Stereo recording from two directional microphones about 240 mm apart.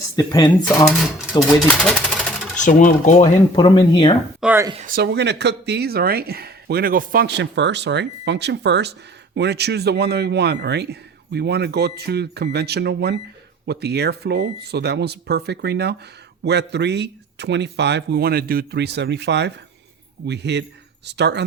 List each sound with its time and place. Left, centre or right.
0.2 s speech: centre
1.6 s speech: centre
2.6 s speech: left
4.4 s speech: centre
4.7 s speech: right